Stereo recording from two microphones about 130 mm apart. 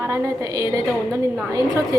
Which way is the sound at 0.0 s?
20° right (ahead or behind).